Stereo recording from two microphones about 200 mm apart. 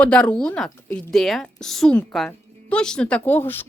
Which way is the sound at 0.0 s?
5° left (ahead or behind).